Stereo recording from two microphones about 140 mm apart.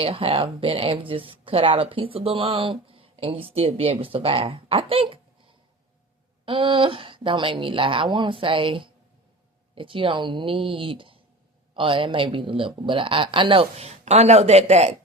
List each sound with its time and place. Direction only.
0.0 s speech: 40° right (ahead or behind)
6.4 s speech: 35° right (ahead or behind)